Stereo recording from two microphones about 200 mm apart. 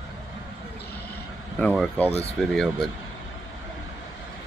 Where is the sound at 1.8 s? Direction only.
10° left (ahead or behind).